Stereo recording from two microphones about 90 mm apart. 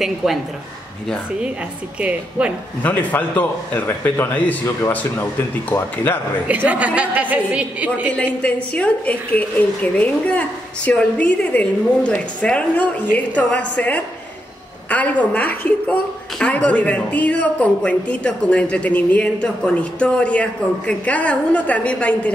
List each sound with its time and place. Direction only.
0.0 s speech: centre (ahead or behind)
2.0 s a woman's voice: 15° right (ahead or behind)
2.8 s a man's voice: 20° left (ahead or behind)
5.7 s a man's voice: 20° left (ahead or behind)
6.4 s a woman's voice: 15° right (ahead or behind)
8.4 s a woman's voice: 15° left (ahead or behind)